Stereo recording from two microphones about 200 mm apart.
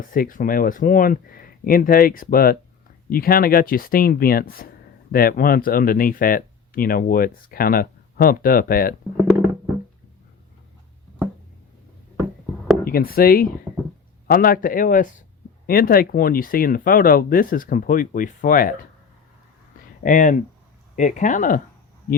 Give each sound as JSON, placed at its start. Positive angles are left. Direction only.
{"t": 0.0, "sound": "speech", "side_deg": 45}
{"t": 12.8, "sound": "speech", "side_deg": 45}
{"t": 20.0, "sound": "speech", "side_deg": 40}